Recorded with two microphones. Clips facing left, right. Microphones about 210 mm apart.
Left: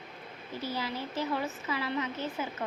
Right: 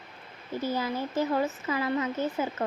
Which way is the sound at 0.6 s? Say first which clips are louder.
Right 5 dB; 50° right (ahead or behind).